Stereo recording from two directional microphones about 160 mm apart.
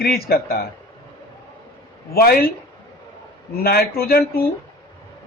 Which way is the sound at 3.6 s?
75° left (ahead or behind).